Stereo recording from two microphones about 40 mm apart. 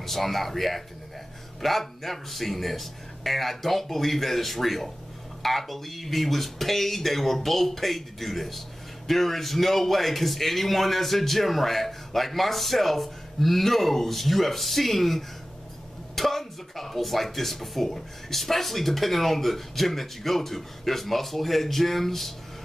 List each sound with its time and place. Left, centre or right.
0.0 s speech: centre